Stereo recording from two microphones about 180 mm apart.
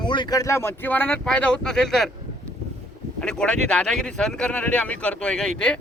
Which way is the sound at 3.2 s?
5° left (ahead or behind).